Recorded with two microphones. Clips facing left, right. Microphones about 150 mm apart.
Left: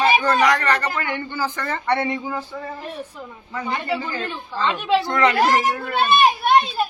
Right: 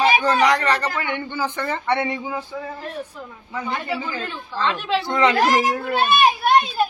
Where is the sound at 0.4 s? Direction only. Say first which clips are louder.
Even; 25° right (ahead or behind).